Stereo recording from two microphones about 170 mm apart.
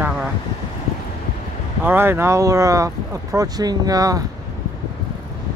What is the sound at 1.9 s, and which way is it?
Speech, 15° right (ahead or behind).